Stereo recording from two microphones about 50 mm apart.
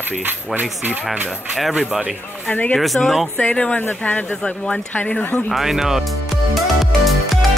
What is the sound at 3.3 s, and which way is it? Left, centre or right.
Speech, left.